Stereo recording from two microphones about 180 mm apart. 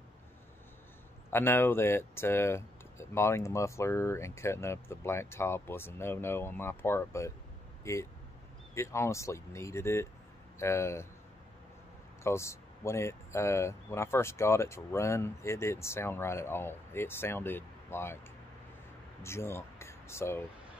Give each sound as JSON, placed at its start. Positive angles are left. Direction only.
{"t": 1.3, "sound": "speech", "side_deg": 15}
{"t": 12.2, "sound": "speech", "side_deg": 15}
{"t": 19.2, "sound": "speech", "side_deg": 15}